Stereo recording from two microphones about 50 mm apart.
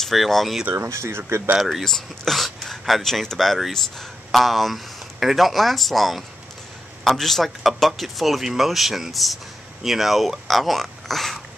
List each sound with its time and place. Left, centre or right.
0.0 s a man's voice: centre
0.7 s speech: right
1.6 s a man's voice: centre
1.9 s a man's voice: centre